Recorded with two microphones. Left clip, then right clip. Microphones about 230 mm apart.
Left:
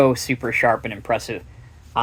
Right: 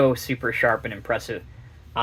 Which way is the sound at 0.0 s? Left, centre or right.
Left.